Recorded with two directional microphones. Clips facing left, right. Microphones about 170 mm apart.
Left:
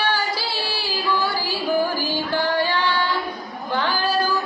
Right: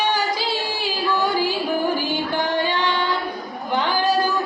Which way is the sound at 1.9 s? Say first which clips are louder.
Right 1 dB; 20° right (ahead or behind).